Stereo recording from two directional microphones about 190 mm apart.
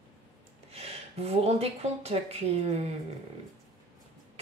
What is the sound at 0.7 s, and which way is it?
A woman's voice, 30° right (ahead or behind).